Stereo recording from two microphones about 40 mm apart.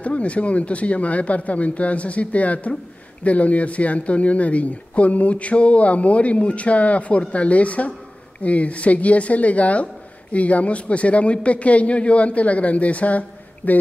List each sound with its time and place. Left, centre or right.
0.0 s speech: left